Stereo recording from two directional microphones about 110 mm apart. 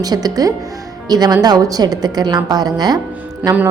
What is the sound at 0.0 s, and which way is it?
A woman's voice, 35° right (ahead or behind).